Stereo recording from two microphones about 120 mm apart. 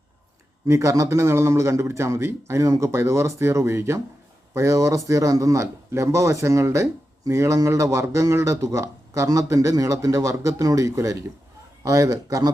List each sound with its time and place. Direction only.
0.6 s a man's voice: 25° right (ahead or behind)